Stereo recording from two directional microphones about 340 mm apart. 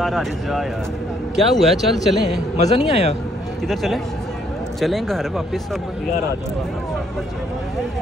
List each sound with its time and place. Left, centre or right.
0.0 s a man's voice: centre
2.5 s speech: centre
3.6 s a man's voice: centre